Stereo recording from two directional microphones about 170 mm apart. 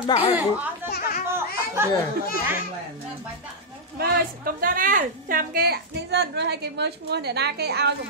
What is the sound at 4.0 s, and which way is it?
A woman's voice, 60° right (ahead or behind).